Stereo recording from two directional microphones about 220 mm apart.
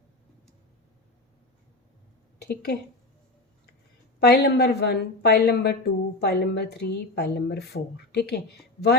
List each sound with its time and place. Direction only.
2.4 s a woman's voice: 45° left (ahead or behind)
4.2 s a woman's voice: 50° left (ahead or behind)